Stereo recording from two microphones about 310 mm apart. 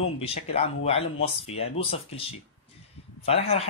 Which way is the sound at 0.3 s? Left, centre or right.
Centre.